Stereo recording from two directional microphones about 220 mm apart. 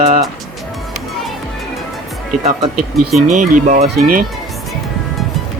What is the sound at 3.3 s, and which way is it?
Speech, 35° right (ahead or behind).